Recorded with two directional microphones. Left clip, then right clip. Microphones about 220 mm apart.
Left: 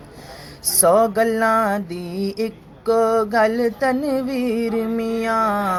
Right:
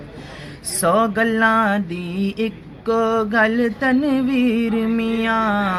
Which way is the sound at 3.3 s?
10° left (ahead or behind).